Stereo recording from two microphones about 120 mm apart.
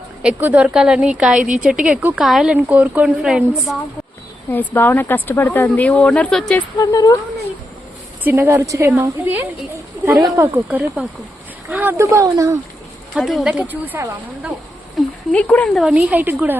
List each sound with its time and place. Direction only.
0.2 s speech: 10° right (ahead or behind)
4.5 s speech: 15° left (ahead or behind)
6.7 s speech: 30° left (ahead or behind)
8.2 s speech: 15° right (ahead or behind)
9.2 s speech: 10° right (ahead or behind)
10.2 s speech: 25° right (ahead or behind)
10.7 s speech: 15° right (ahead or behind)
13.1 s speech: 5° right (ahead or behind)
14.9 s a sound: 10° left (ahead or behind)
15.7 s speech: 10° right (ahead or behind)